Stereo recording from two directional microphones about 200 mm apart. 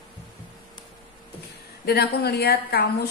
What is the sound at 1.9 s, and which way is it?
A woman's voice, 55° left (ahead or behind).